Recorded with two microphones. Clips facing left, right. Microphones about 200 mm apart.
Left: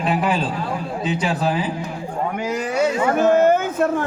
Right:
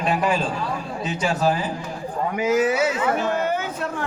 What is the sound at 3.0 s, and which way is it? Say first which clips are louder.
Speech: left 7 dB; 45° left (ahead or behind).